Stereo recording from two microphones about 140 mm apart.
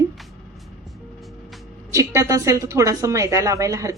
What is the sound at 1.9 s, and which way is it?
A woman's voice, 20° right (ahead or behind).